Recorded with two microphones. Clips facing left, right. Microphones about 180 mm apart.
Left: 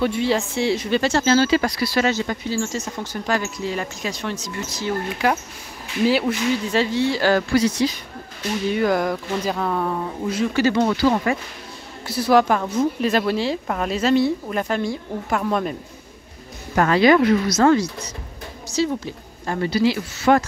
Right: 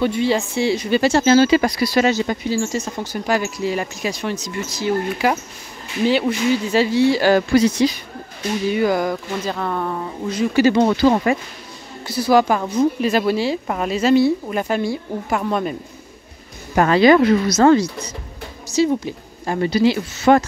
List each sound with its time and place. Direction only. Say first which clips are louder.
0.0 s speech: right 2 dB; centre (ahead or behind); by 7.9 s 20° right (ahead or behind)
8.7 s a woman's voice: right 1 dB; centre (ahead or behind)
10.5 s speech: right 6 dB; 15° right (ahead or behind)
10.8 s speech: right 3 dB; 30° right (ahead or behind)
12.1 s a woman's voice: right 1 dB; centre (ahead or behind)
16.7 s speech: right 3 dB; 25° right (ahead or behind)